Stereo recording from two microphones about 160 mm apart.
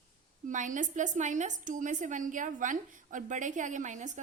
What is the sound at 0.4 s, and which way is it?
A woman's voice, 55° right (ahead or behind).